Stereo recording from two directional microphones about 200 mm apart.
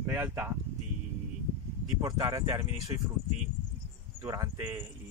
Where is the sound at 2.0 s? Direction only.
15° right (ahead or behind).